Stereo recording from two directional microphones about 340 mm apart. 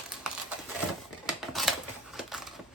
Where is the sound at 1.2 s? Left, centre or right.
Centre.